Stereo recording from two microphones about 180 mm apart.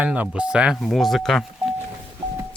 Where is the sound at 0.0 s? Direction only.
10° right (ahead or behind).